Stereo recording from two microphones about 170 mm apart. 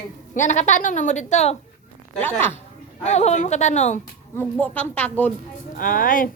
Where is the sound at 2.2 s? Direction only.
15° left (ahead or behind).